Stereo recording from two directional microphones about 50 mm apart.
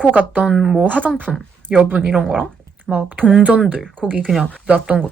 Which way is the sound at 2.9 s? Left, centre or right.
Right.